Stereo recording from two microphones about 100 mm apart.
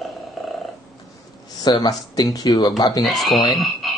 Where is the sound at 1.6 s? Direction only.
40° left (ahead or behind).